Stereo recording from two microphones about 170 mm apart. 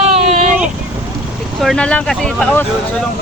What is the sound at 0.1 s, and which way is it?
Vehicle, 40° right (ahead or behind).